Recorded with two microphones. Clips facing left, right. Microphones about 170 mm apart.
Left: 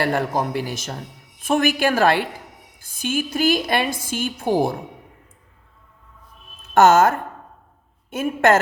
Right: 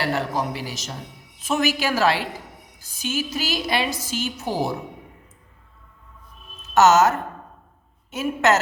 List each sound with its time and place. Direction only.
0.0 s a woman's voice: 50° left (ahead or behind)
6.7 s a woman's voice: 55° left (ahead or behind)